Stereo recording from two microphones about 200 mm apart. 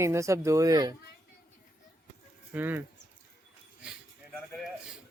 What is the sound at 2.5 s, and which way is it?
Speech, 10° right (ahead or behind).